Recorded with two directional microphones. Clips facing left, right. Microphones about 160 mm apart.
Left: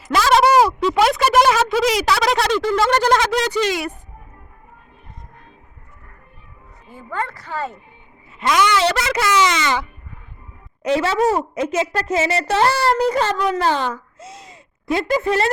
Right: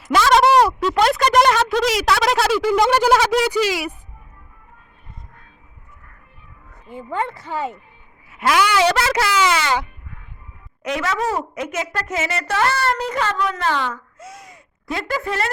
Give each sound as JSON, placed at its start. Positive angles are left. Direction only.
{"t": 0.0, "sound": "a sound", "side_deg": 0}
{"t": 6.9, "sound": "speech", "side_deg": -20}
{"t": 10.8, "sound": "a woman's voice", "side_deg": 30}